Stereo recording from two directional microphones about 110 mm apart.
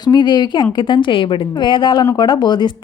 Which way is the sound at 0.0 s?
45° left (ahead or behind).